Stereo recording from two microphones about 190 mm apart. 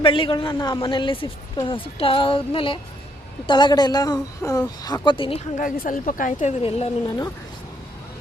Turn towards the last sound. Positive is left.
turn(degrees=30)  # may be behind; listen again after turning